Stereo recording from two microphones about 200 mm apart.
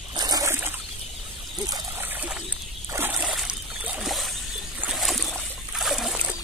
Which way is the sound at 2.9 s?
10° right (ahead or behind).